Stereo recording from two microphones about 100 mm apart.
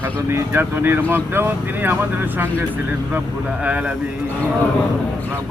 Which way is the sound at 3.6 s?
15° right (ahead or behind).